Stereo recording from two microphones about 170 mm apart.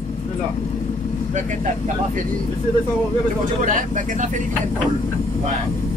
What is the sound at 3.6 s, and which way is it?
Speech, 50° right (ahead or behind).